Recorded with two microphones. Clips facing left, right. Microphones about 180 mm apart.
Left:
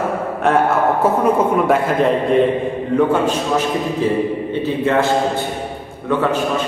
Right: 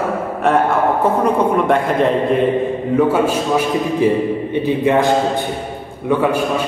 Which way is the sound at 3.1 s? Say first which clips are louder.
Right 1 dB; 10° right (ahead or behind).